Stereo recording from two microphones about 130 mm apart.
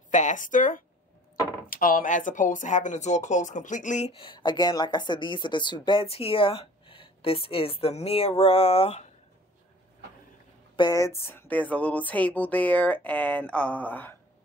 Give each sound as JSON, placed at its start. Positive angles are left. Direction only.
{"t": 0.1, "sound": "speech", "side_deg": 75}
{"t": 4.1, "sound": "speech", "side_deg": 40}
{"t": 10.8, "sound": "speech", "side_deg": 25}